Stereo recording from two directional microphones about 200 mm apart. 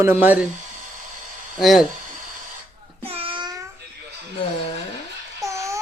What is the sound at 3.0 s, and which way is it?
Child singing, 30° right (ahead or behind).